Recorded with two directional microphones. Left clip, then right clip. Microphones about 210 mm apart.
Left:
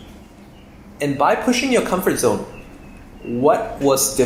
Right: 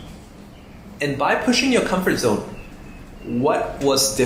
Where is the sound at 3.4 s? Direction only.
50° left (ahead or behind).